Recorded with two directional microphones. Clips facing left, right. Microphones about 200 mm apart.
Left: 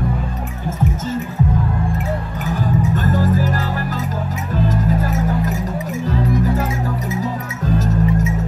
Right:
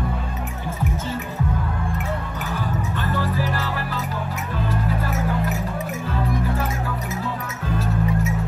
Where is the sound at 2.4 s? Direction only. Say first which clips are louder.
Left 7 dB; 45° left (ahead or behind).